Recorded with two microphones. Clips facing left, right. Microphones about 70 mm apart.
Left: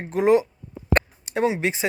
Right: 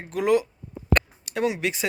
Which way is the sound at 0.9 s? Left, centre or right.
Left.